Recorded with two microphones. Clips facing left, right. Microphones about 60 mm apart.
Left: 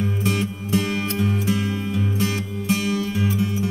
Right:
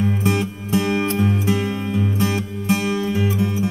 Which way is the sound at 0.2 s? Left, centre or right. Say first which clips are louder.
Right 2 dB; right.